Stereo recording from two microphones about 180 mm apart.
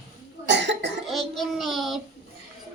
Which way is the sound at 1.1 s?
Centre (ahead or behind).